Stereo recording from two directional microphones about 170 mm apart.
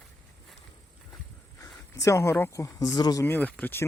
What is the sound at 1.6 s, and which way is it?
Speech, 20° left (ahead or behind).